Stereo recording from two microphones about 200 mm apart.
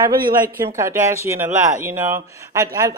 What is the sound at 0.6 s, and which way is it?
Speech, 15° right (ahead or behind).